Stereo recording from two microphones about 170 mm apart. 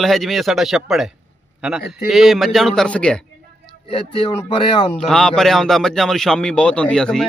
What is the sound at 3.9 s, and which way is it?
Speech, 35° left (ahead or behind).